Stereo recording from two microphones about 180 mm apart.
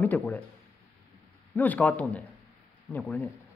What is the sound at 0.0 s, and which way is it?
Speech, 10° left (ahead or behind).